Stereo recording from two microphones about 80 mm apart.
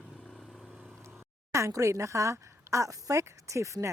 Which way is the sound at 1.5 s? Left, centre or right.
Right.